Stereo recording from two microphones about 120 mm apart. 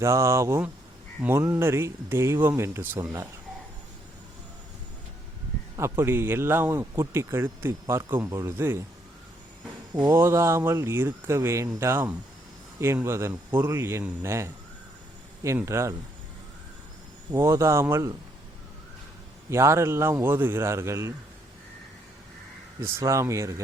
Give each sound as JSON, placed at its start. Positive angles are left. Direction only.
{"t": 0.0, "sound": "speech", "side_deg": -25}
{"t": 5.7, "sound": "speech", "side_deg": -25}
{"t": 10.1, "sound": "speech", "side_deg": -20}
{"t": 15.5, "sound": "speech", "side_deg": -20}
{"t": 17.3, "sound": "speech", "side_deg": -25}
{"t": 19.5, "sound": "speech", "side_deg": -25}
{"t": 22.8, "sound": "speech", "side_deg": -20}